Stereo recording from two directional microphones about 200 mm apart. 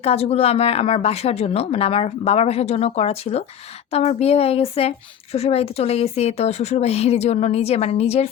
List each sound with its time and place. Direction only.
0.0 s speech: 30° left (ahead or behind)